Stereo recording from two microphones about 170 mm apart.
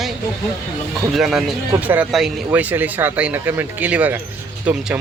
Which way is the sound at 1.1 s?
Centre (ahead or behind).